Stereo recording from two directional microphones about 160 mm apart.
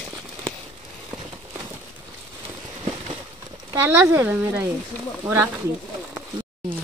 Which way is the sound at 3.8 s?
15° right (ahead or behind).